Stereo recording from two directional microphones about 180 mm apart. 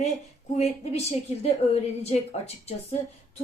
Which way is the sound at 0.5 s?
35° left (ahead or behind).